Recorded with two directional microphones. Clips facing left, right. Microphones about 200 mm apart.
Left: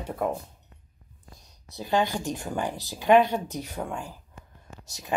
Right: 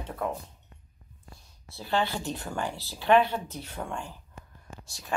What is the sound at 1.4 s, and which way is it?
Speech, 20° left (ahead or behind).